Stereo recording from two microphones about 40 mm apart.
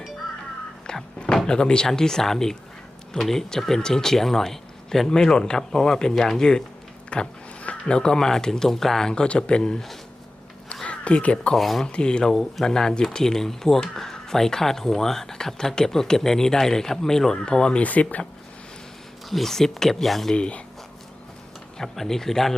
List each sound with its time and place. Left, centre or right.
0.9 s thunk: left
1.5 s speech: left
7.1 s speech: left; by 9.1 s centre
9.1 s speech: left
10.8 s speech: left
11.5 s speech: centre
11.9 s speech: left
12.3 s speech: centre; by 17.8 s left
17.8 s speech: left
19.3 s speech: centre
20.3 s speech: left
21.8 s speech: centre